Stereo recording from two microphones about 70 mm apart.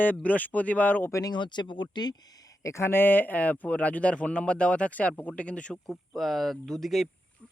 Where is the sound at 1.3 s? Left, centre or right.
Left.